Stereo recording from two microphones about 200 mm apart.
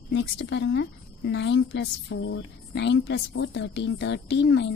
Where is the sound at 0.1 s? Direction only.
65° left (ahead or behind).